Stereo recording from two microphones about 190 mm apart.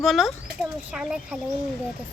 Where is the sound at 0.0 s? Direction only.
Centre (ahead or behind).